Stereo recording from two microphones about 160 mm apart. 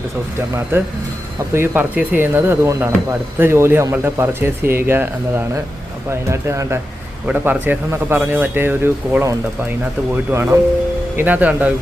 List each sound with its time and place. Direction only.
0.3 s speech: 15° right (ahead or behind)